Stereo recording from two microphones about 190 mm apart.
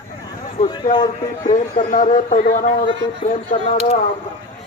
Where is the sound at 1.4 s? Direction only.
45° left (ahead or behind).